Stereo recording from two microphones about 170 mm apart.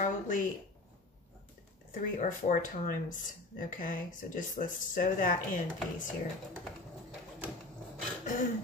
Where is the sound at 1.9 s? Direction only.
50° left (ahead or behind).